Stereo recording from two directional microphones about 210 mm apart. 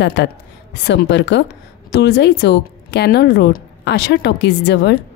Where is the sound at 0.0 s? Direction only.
55° left (ahead or behind).